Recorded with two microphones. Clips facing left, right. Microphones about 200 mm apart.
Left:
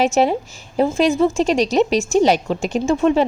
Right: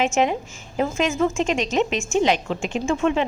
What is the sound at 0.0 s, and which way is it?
A woman's voice, 35° left (ahead or behind).